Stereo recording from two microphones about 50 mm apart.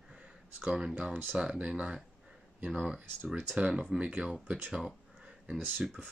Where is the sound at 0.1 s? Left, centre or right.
Centre.